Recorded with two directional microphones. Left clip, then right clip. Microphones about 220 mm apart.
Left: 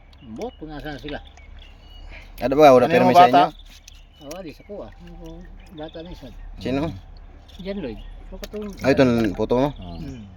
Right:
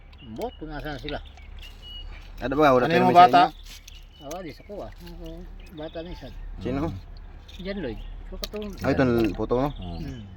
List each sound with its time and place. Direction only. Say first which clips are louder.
0.3 s speech: left 1 dB; 10° left (ahead or behind)
2.4 s speech: left 7 dB; 45° left (ahead or behind)
2.9 s speech: left 2 dB; centre (ahead or behind)
4.2 s speech: even; 15° left (ahead or behind)
5.7 s speech: even; 20° left (ahead or behind)
6.6 s speech: left 4 dB; 40° left (ahead or behind)
7.7 s speech: left 2 dB; 20° left (ahead or behind)
8.8 s speech: left 5 dB; 40° left (ahead or behind)